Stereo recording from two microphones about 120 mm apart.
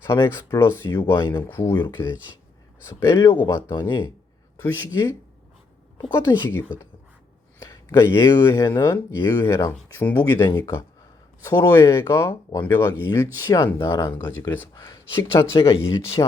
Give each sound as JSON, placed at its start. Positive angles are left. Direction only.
{"t": 0.1, "sound": "speech", "side_deg": 20}
{"t": 3.7, "sound": "speech", "side_deg": 40}
{"t": 4.6, "sound": "speech", "side_deg": 20}
{"t": 6.1, "sound": "speech", "side_deg": 20}